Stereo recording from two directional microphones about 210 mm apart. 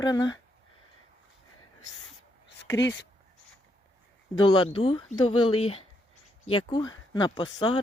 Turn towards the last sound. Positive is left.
turn(degrees=20)  # may be behind; listen again after turning